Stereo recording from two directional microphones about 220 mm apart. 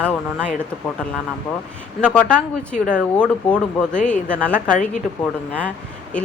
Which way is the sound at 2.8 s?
10° right (ahead or behind).